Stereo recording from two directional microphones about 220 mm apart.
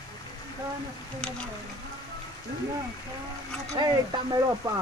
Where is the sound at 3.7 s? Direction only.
20° right (ahead or behind).